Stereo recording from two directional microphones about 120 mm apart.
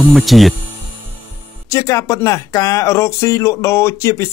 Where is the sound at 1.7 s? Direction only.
30° left (ahead or behind).